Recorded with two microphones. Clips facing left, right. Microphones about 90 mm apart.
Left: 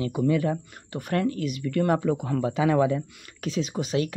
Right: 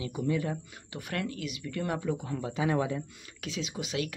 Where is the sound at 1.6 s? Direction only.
60° left (ahead or behind); by 3.0 s 90° left.